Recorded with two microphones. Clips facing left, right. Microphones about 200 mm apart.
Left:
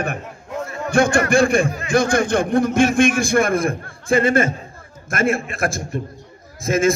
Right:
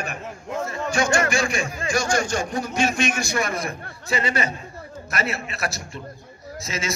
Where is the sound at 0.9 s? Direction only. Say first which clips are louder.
Left 7 dB; 55° left (ahead or behind).